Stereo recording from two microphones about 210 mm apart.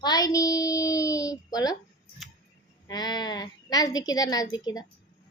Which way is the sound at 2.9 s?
20° left (ahead or behind).